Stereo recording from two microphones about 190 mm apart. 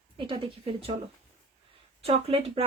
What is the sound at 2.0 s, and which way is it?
Speech, 30° right (ahead or behind).